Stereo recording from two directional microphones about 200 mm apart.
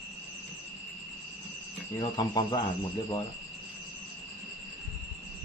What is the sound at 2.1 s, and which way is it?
Speech, 20° left (ahead or behind).